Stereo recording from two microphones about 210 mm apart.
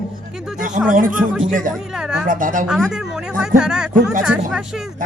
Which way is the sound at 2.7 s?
Centre (ahead or behind).